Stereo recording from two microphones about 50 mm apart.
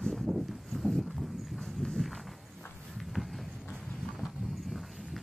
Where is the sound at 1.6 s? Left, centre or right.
Centre.